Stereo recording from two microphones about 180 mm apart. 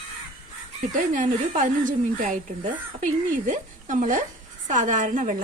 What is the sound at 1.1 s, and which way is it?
Speech, 45° right (ahead or behind).